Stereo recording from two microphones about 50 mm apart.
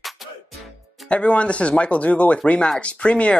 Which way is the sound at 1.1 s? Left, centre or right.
Left.